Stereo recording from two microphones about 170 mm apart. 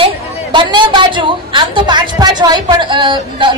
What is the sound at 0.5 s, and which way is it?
A woman's voice, 30° right (ahead or behind).